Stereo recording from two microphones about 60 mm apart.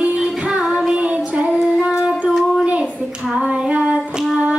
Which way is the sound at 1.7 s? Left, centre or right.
Centre.